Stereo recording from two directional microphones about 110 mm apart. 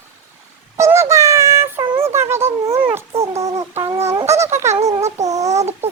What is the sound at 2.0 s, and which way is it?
Dog, 25° right (ahead or behind).